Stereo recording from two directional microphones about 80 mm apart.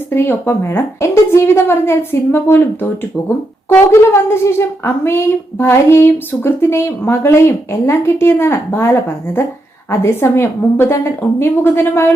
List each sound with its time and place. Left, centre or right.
0.1 s speech: left